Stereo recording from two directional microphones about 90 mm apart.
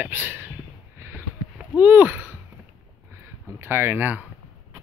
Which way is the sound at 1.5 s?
15° right (ahead or behind).